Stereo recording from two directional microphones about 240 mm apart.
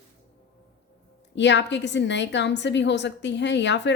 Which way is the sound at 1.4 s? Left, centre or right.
Left.